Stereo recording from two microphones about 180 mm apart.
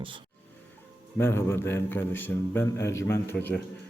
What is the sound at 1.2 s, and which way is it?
A man's voice, 15° left (ahead or behind).